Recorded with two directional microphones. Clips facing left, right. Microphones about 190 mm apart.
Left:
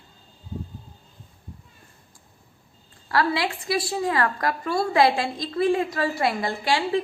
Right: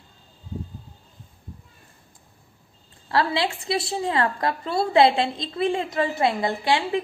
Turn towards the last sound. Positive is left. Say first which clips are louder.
# right 1 dB
turn(degrees=-20)  # may be behind; listen again after turning